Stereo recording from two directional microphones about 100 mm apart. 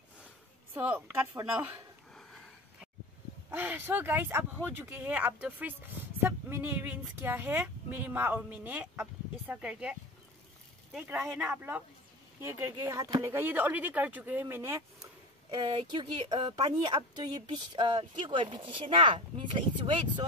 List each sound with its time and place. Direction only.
0.7 s speech: 20° right (ahead or behind)
3.4 s speech: 20° right (ahead or behind)
11.3 s speech: 20° right (ahead or behind); by 13.1 s 35° right (ahead or behind)
13.2 s speech: 20° right (ahead or behind)
15.5 s speech: 55° right (ahead or behind)